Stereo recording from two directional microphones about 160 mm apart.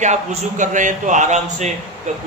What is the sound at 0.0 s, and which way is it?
A man's voice, 50° right (ahead or behind).